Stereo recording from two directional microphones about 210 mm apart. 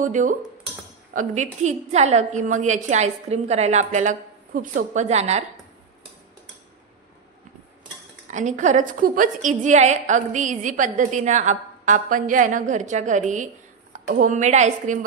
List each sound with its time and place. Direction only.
0.0 s a woman's voice: 35° right (ahead or behind)
8.3 s a woman's voice: 35° right (ahead or behind)